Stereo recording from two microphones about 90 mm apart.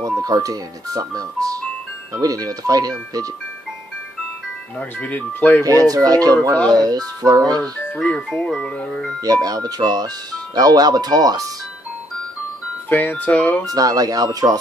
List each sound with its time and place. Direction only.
0.0 s speech: 45° right (ahead or behind)
4.7 s speech: 15° left (ahead or behind)
5.6 s speech: 40° right (ahead or behind)
7.9 s speech: 15° left (ahead or behind)
9.2 s speech: 45° right (ahead or behind)
12.9 s speech: 20° left (ahead or behind)
13.7 s speech: 40° right (ahead or behind)